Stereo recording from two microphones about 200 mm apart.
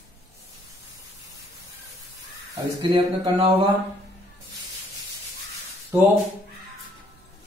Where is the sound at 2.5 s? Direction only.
20° right (ahead or behind).